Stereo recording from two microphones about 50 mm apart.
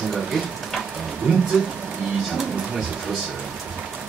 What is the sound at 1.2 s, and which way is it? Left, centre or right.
Speech, centre.